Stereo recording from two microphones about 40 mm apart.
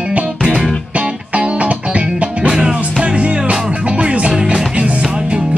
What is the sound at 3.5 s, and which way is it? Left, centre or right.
Music, centre.